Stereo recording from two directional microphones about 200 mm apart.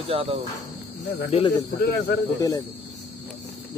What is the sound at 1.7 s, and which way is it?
Speech, 50° left (ahead or behind).